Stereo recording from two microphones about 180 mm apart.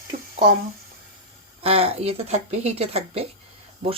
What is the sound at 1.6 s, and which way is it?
Speech, 35° right (ahead or behind).